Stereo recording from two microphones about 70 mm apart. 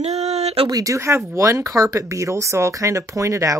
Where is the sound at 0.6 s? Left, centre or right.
Right.